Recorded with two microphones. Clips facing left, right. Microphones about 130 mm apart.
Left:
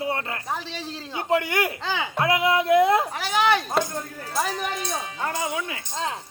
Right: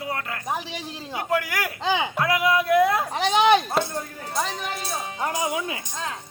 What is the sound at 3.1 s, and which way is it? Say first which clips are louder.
Speech: right 4 dB; 25° right (ahead or behind).